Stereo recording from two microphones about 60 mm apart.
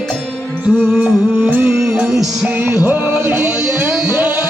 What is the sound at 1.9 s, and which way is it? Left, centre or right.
Music, centre.